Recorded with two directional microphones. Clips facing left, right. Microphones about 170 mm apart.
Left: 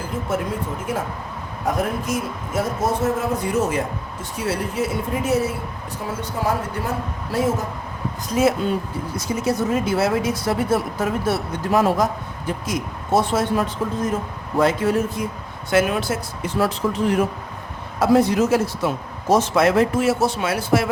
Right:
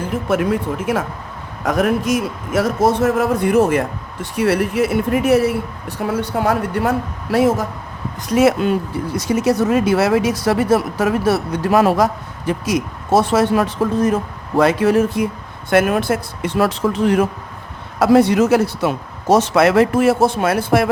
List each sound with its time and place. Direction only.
0.3 s a man's voice: 75° right (ahead or behind)
15.7 s speech: 55° right (ahead or behind); by 17.2 s 85° right
18.0 s a man's voice: 75° right (ahead or behind); by 20.9 s 55° right (ahead or behind)